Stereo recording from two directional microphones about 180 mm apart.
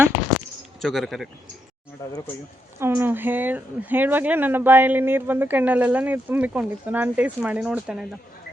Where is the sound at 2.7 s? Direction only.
15° right (ahead or behind).